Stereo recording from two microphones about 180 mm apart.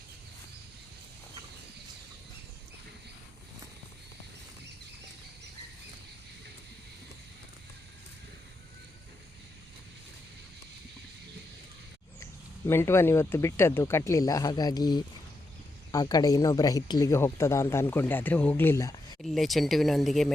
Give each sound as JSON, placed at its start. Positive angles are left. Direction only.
{"t": 12.2, "sound": "speech", "side_deg": 15}
{"t": 19.2, "sound": "speech", "side_deg": 0}